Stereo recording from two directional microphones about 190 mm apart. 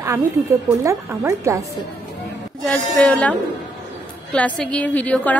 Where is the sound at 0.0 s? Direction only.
15° right (ahead or behind).